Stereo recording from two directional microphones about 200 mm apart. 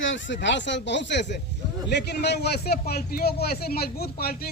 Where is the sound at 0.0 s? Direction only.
65° left (ahead or behind).